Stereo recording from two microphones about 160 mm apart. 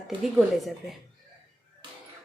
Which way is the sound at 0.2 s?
Centre (ahead or behind).